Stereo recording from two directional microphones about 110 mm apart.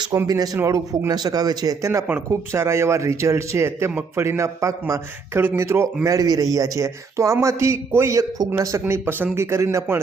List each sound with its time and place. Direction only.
0.1 s speech: 35° right (ahead or behind)